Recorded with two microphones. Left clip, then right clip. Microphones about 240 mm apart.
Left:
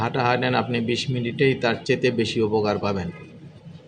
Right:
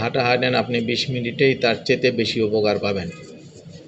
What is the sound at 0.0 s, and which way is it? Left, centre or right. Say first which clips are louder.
A man's voice: right 3 dB; centre.